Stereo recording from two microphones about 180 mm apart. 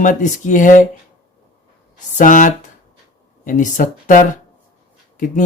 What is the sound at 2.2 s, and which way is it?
Speech, 45° left (ahead or behind).